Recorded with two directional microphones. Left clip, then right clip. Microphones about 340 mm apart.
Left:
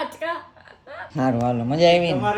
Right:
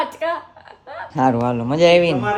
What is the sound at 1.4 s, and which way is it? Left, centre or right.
Speech, centre.